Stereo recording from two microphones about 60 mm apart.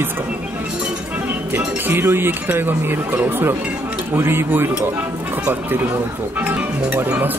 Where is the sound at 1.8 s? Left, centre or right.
Right.